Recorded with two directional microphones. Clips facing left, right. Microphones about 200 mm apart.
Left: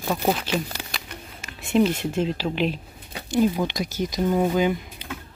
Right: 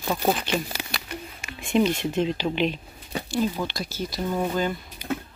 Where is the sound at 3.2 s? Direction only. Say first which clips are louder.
Left 5 dB; 15° left (ahead or behind).